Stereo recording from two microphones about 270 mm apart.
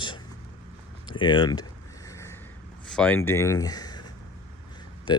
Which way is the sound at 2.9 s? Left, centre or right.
Centre.